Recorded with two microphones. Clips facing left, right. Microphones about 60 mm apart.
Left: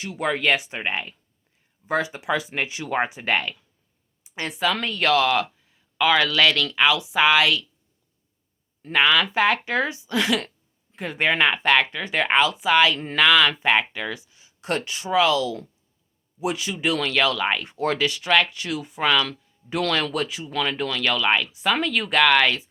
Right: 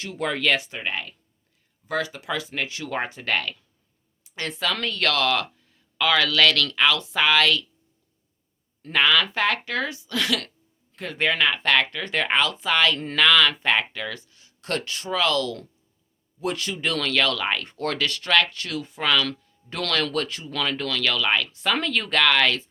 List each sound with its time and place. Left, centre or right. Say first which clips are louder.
0.0 s speech: left 2 dB; centre
8.8 s speech: left 1 dB; centre